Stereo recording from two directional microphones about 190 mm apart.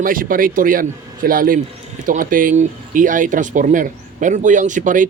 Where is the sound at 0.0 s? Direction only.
45° right (ahead or behind).